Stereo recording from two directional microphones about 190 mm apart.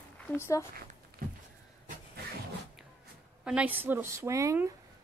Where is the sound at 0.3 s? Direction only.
15° left (ahead or behind).